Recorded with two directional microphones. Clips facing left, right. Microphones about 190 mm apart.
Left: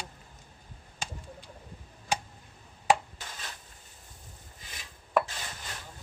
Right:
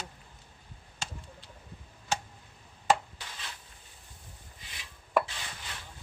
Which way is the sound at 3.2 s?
45° left (ahead or behind).